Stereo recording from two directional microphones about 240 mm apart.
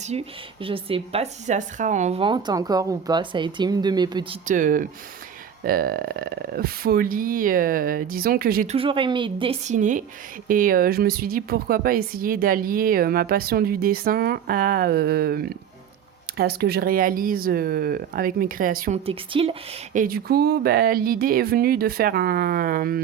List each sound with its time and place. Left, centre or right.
0.0 s speech: right
4.4 s speech: right
8.7 s speech: right
19.0 s speech: right